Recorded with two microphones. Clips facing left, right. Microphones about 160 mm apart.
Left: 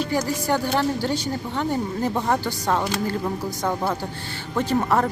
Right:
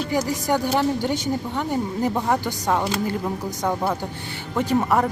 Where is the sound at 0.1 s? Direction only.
15° right (ahead or behind).